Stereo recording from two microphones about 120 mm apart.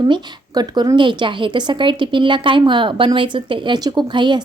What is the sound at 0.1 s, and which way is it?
A woman's voice, 35° right (ahead or behind).